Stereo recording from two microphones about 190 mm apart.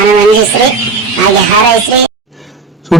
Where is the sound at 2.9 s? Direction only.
Centre (ahead or behind).